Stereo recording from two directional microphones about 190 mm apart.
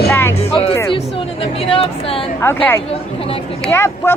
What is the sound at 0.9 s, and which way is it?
Music, 30° left (ahead or behind).